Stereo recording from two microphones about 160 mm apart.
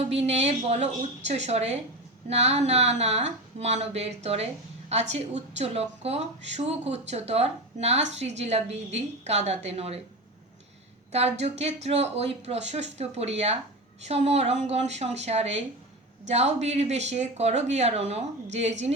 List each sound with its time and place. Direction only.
0.1 s a woman's voice: 40° right (ahead or behind)
11.1 s speech: 40° right (ahead or behind)